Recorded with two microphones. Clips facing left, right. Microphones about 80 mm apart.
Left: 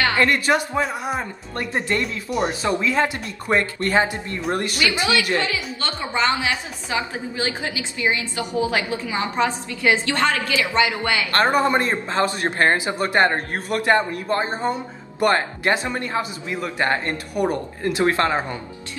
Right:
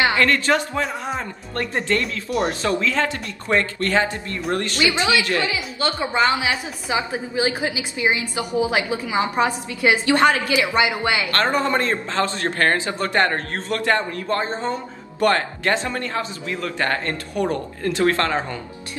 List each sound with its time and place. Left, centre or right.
0.1 s speech: centre
4.9 s a woman's voice: right
11.3 s a man's voice: centre